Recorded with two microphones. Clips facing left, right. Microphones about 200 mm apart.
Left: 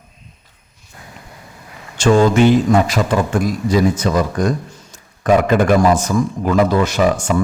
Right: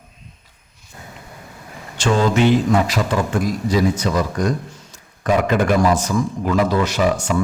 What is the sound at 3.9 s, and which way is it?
Speech, 50° left (ahead or behind).